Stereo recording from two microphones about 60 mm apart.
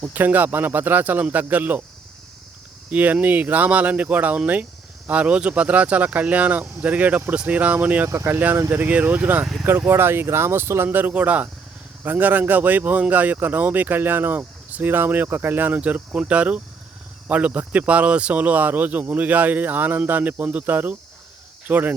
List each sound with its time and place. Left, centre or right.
0.1 s speech: right
2.9 s speech: right
8.0 s speech: right
8.7 s speech: right
9.6 s speech: right
10.8 s speech: right